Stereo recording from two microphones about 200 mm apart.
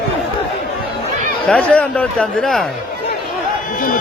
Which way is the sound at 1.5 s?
5° left (ahead or behind).